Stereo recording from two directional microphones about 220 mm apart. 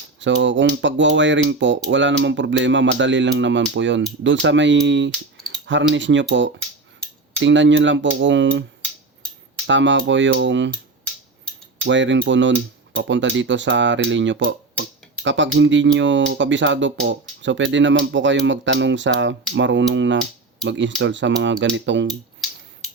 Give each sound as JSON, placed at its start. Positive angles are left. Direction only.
{"t": 0.2, "sound": "speech", "side_deg": -55}
{"t": 9.6, "sound": "speech", "side_deg": -55}
{"t": 11.9, "sound": "speech", "side_deg": -55}